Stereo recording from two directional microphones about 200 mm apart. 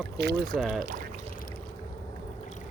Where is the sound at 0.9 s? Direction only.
40° right (ahead or behind).